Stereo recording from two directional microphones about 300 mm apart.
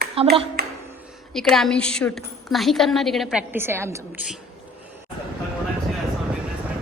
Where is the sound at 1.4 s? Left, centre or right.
Centre.